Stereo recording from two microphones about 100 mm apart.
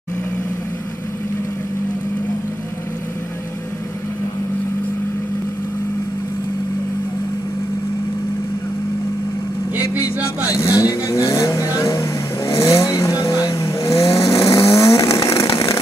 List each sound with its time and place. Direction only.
10.5 s vehicle: 30° left (ahead or behind)